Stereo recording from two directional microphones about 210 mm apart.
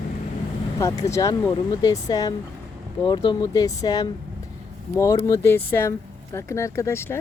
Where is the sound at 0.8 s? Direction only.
15° left (ahead or behind).